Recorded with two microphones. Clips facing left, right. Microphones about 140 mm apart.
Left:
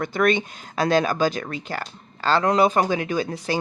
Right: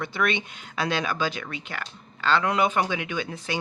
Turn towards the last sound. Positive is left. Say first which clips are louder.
# left 6 dB
turn(degrees=35)  # may be behind; listen again after turning